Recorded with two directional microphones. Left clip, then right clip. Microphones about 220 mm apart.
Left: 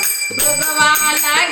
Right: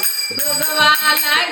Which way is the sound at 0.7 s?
5° right (ahead or behind).